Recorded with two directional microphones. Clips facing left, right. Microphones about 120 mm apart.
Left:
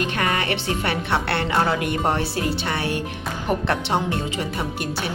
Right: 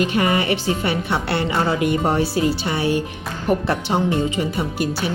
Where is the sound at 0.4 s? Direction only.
65° left (ahead or behind).